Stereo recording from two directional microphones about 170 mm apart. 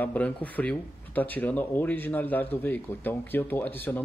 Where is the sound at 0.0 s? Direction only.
10° left (ahead or behind).